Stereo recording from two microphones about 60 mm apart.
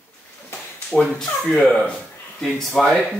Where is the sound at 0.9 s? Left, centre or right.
Centre.